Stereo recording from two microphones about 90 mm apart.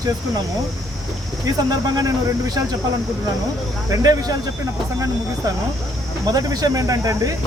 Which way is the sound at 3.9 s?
45° right (ahead or behind).